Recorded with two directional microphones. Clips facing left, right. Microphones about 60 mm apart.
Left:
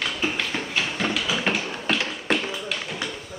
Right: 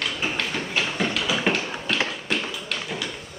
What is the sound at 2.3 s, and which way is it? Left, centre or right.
Tap, centre.